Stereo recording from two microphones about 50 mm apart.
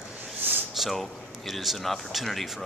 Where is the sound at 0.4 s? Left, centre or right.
Right.